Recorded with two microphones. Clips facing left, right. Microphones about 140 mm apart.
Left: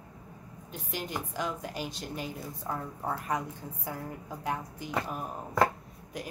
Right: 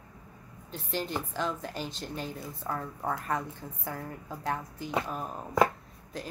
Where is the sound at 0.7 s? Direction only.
10° left (ahead or behind).